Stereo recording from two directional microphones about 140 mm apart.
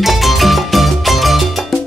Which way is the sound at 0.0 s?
Centre (ahead or behind).